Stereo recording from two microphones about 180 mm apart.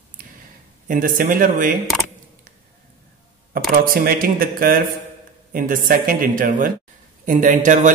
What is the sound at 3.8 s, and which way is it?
A man's voice, 55° right (ahead or behind).